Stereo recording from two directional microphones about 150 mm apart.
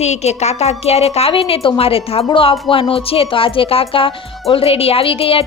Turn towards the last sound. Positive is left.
turn(degrees=40)  # may be behind; listen again after turning